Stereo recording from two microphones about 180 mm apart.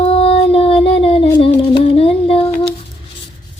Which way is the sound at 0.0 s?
35° left (ahead or behind).